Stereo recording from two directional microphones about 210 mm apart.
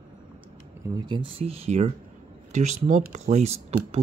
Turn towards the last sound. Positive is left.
turn(degrees=-30)  # may be behind; listen again after turning